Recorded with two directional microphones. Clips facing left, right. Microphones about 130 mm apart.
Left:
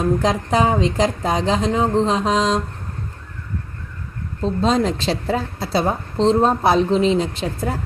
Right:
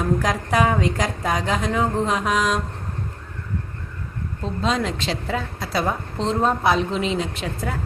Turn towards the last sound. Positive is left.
turn(degrees=30)  # may be behind; listen again after turning